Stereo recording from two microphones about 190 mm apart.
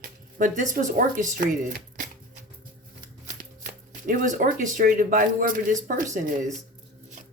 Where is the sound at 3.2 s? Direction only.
45° right (ahead or behind).